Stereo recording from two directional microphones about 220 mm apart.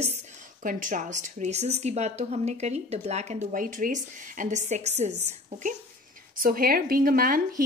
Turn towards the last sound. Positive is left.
turn(degrees=-40)  # may be behind; listen again after turning